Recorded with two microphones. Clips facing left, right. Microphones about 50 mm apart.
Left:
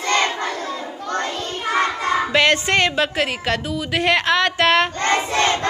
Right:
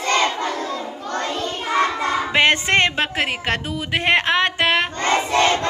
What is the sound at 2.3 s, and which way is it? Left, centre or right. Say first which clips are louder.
A woman's voice: right 1 dB; right.